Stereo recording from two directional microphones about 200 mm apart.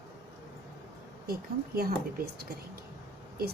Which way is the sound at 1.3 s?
50° right (ahead or behind).